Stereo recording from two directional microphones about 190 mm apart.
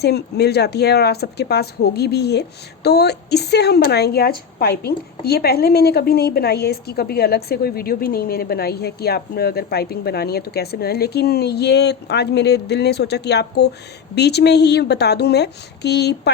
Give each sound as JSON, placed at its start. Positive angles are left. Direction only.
{"t": 0.0, "sound": "speech", "side_deg": 60}